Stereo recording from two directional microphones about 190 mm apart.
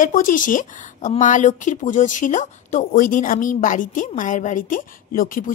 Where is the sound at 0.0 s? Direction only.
45° left (ahead or behind).